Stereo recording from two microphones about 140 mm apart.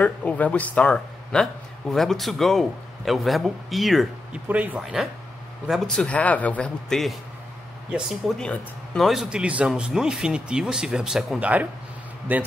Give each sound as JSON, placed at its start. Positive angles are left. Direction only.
{"t": 0.0, "sound": "a man's voice", "side_deg": 10}